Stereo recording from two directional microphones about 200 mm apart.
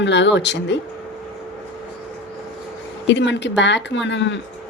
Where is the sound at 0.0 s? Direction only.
60° left (ahead or behind).